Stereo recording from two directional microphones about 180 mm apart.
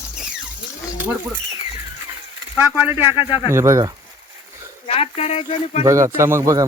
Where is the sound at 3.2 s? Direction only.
30° left (ahead or behind).